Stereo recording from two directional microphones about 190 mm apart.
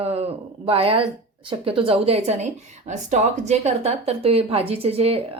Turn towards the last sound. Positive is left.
turn(degrees=-30)  # may be behind; listen again after turning